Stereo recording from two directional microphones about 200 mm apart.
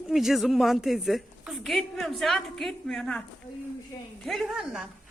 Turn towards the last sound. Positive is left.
turn(degrees=-5)  # may be behind; listen again after turning